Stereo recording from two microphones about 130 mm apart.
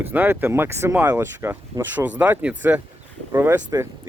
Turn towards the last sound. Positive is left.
turn(degrees=-20)  # may be behind; listen again after turning